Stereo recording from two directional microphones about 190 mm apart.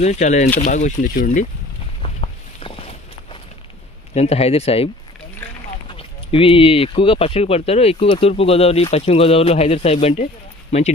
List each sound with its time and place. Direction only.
0.0 s speech: 35° left (ahead or behind)
2.0 s a sound: 30° left (ahead or behind)
4.1 s speech: 35° left (ahead or behind)
5.9 s speech: 30° left (ahead or behind)